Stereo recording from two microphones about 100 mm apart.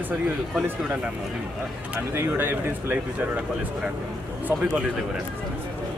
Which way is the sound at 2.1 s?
25° right (ahead or behind).